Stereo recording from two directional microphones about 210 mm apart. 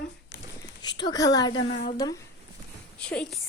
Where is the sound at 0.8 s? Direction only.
20° left (ahead or behind).